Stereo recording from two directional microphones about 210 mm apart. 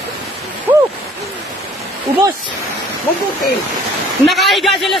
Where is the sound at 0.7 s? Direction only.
10° right (ahead or behind).